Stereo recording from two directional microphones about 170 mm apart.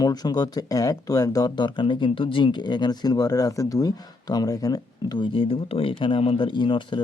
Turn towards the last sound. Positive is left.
turn(degrees=30)  # may be behind; listen again after turning